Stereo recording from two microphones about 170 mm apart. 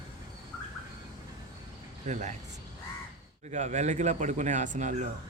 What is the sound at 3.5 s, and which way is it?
Speech, 45° right (ahead or behind).